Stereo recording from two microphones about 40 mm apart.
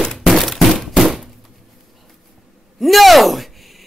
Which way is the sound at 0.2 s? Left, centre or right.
Centre.